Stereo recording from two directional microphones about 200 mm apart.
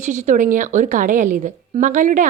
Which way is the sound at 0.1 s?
40° right (ahead or behind).